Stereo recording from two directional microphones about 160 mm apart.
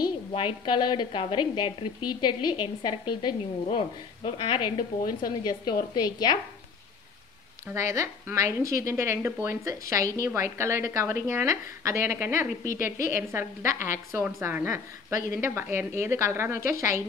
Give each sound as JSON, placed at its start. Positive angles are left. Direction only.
{"t": 0.0, "sound": "a woman's voice", "side_deg": 35}
{"t": 7.6, "sound": "a woman's voice", "side_deg": -20}